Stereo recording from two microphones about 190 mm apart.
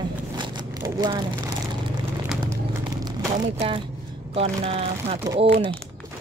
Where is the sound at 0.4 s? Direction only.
25° right (ahead or behind).